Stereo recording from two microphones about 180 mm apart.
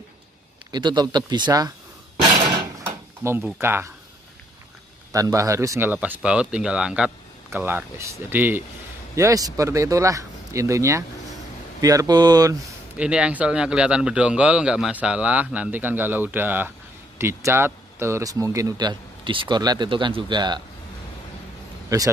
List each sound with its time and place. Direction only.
0.7 s speech: 25° right (ahead or behind)
3.2 s speech: 15° right (ahead or behind)
5.1 s speech: 20° right (ahead or behind)
12.9 s speech: 5° right (ahead or behind); by 20.6 s 25° right (ahead or behind)
21.8 s speech: 20° right (ahead or behind)